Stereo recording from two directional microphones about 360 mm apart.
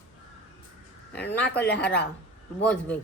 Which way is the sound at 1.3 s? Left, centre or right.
Centre.